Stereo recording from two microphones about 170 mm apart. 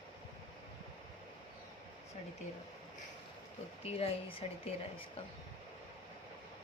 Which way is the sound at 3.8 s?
35° left (ahead or behind).